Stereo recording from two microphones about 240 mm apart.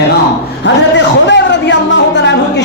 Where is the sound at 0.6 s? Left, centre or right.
Left.